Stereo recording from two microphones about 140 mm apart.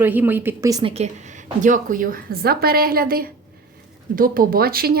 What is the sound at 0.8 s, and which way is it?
A woman's voice, 50° right (ahead or behind).